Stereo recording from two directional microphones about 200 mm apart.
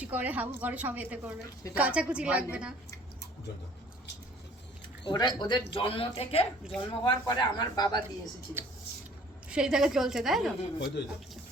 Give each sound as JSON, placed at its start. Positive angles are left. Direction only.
{"t": 0.0, "sound": "a woman's voice", "side_deg": -10}
{"t": 5.0, "sound": "speech", "side_deg": 20}
{"t": 9.5, "sound": "a woman's voice", "side_deg": -5}
{"t": 10.8, "sound": "speech", "side_deg": 60}